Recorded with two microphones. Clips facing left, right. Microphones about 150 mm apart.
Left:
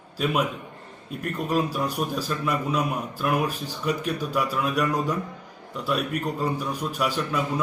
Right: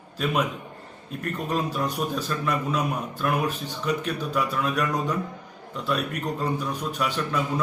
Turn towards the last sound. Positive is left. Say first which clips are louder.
# even
turn(degrees=10)  # may be behind; listen again after turning